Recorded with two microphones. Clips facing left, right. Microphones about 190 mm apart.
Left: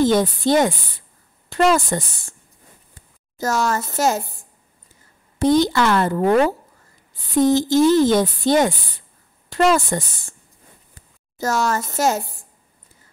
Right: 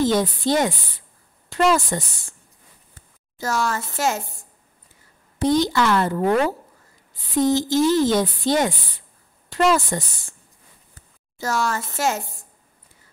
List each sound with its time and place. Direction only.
0.0 s speech: 50° left (ahead or behind)
3.3 s speech: 45° left (ahead or behind)
5.4 s speech: 55° left (ahead or behind)
7.3 s speech: 50° left (ahead or behind)
11.3 s speech: 45° left (ahead or behind)